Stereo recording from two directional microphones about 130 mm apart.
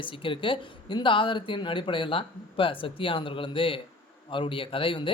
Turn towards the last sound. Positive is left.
turn(degrees=45)  # may be behind; listen again after turning